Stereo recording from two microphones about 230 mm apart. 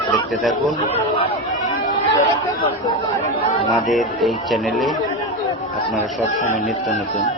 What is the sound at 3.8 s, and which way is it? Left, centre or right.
Speech, centre.